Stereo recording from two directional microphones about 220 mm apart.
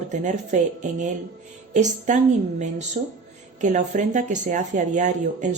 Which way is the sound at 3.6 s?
35° right (ahead or behind).